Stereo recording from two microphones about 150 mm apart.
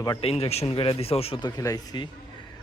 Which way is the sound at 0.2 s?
40° left (ahead or behind).